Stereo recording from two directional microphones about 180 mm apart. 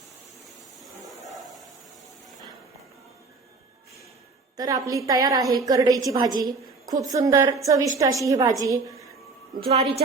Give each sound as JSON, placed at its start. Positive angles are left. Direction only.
{"t": 4.5, "sound": "a woman's voice", "side_deg": -20}
{"t": 9.6, "sound": "a woman's voice", "side_deg": -30}